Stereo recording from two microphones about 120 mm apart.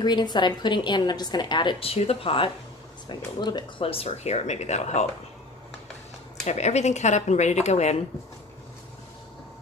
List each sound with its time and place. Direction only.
0.0 s a woman's voice: 35° left (ahead or behind)
3.1 s speech: 40° left (ahead or behind); by 5.0 s 70° left (ahead or behind)
6.4 s speech: 70° left (ahead or behind)